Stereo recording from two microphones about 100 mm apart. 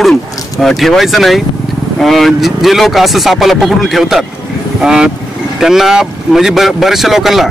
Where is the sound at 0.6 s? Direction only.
Centre (ahead or behind).